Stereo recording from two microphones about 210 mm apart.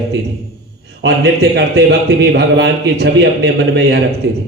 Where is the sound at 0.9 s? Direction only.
55° right (ahead or behind).